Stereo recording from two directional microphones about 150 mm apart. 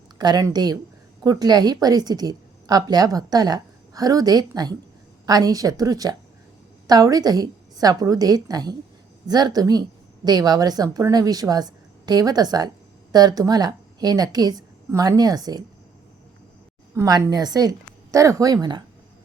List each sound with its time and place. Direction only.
0.2 s a woman's voice: 25° right (ahead or behind)
16.9 s a woman's voice: 25° right (ahead or behind)